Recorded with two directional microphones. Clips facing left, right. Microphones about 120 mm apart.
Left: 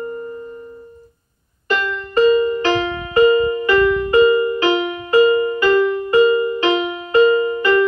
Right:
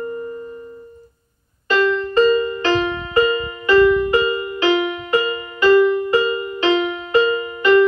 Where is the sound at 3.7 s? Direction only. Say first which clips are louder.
Right 6 dB; 20° right (ahead or behind).